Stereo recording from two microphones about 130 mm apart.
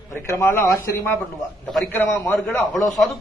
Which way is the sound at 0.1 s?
20° left (ahead or behind).